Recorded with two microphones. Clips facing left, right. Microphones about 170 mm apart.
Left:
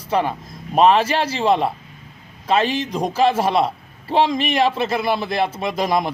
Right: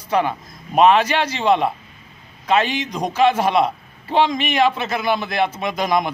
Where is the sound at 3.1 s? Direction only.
30° left (ahead or behind).